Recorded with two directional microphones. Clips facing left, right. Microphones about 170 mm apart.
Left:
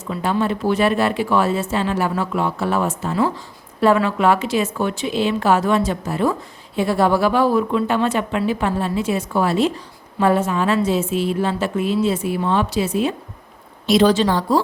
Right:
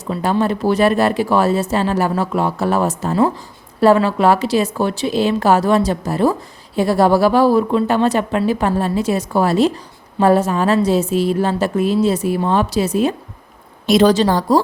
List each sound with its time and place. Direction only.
0.1 s speech: 40° right (ahead or behind)